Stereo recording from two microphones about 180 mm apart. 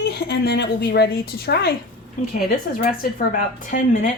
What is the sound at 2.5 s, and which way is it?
Speech, 55° left (ahead or behind).